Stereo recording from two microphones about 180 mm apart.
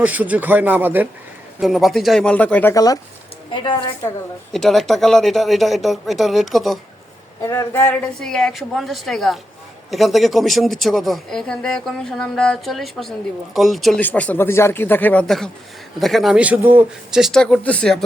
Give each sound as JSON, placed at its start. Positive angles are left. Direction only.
{"t": 0.0, "sound": "a woman's voice", "side_deg": -10}
{"t": 4.5, "sound": "speech", "side_deg": 0}
{"t": 7.4, "sound": "speech", "side_deg": 15}